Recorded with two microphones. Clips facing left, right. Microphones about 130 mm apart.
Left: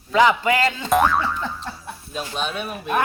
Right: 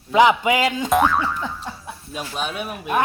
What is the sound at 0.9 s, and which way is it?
Boing, centre (ahead or behind).